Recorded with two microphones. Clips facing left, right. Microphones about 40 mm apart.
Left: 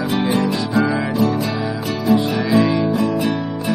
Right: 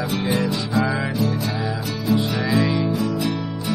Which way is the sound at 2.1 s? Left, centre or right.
Left.